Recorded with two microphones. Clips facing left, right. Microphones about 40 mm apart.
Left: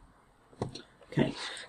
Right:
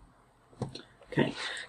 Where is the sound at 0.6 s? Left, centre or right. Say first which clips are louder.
Left 2 dB; left.